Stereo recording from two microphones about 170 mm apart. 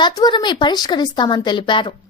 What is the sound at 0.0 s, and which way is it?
A woman's voice, 25° left (ahead or behind).